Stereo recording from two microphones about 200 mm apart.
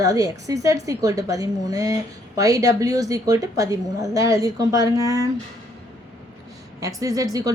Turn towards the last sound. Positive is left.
turn(degrees=-15)  # may be behind; listen again after turning